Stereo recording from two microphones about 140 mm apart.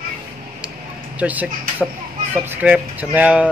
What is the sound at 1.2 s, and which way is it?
Speech, 10° right (ahead or behind).